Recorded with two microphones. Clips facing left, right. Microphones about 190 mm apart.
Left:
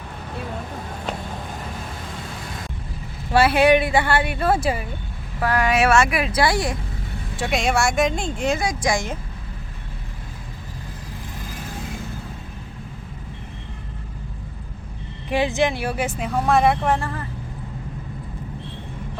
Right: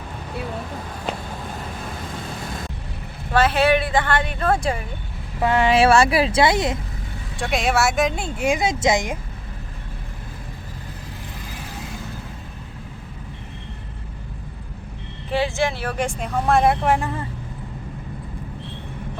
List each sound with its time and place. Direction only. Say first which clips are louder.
3.3 s speech: left 2 dB; 10° left (ahead or behind)
5.4 s speech: right 3 dB; 25° right (ahead or behind)
7.3 s speech: even; centre (ahead or behind)
8.6 s speech: right 3 dB; 20° right (ahead or behind)
15.3 s speech: left 2 dB; 15° left (ahead or behind); by 17.1 s 10° right (ahead or behind)